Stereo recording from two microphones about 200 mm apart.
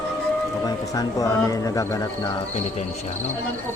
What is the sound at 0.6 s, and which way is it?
Speech, 20° left (ahead or behind).